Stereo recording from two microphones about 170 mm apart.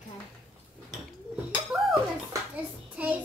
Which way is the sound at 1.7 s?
5° right (ahead or behind).